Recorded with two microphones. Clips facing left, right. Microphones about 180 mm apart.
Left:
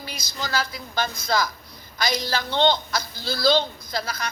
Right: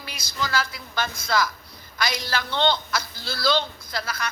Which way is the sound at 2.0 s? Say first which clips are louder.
Left 3 dB; 40° left (ahead or behind).